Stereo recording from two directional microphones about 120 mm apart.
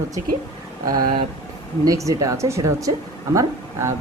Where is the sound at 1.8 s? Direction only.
30° right (ahead or behind).